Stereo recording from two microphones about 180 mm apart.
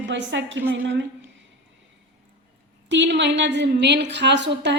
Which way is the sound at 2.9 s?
75° right (ahead or behind).